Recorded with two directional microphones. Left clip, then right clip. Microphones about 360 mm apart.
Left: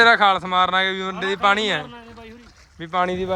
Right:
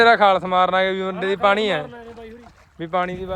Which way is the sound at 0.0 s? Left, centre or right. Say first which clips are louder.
Right 1 dB; centre.